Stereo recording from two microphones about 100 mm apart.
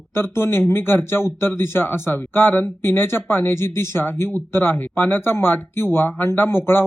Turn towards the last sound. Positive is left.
turn(degrees=20)  # may be behind; listen again after turning